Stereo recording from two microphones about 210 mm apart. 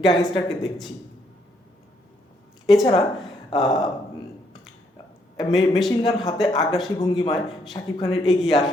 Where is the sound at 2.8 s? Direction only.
25° left (ahead or behind).